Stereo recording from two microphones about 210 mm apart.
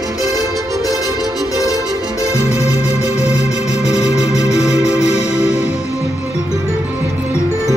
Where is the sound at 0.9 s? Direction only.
15° left (ahead or behind).